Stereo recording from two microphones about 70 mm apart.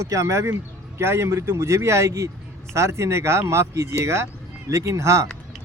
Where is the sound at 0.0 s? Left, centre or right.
Right.